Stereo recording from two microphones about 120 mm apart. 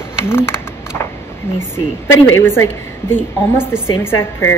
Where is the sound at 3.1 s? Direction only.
20° left (ahead or behind).